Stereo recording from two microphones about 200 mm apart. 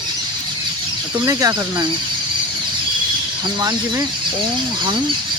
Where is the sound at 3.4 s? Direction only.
20° right (ahead or behind).